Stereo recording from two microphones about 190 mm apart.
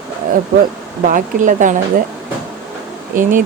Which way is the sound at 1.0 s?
45° right (ahead or behind).